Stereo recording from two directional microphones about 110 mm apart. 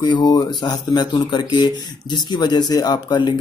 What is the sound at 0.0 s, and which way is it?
Speech, 40° left (ahead or behind).